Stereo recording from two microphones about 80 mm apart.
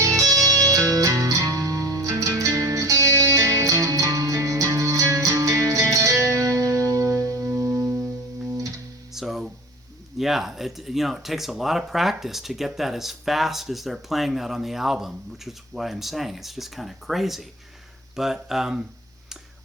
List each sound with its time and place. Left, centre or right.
0.0 s music: right
9.1 s music: centre
10.2 s speech: centre